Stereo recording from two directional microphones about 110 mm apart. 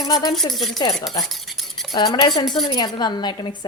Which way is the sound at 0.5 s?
Centre (ahead or behind).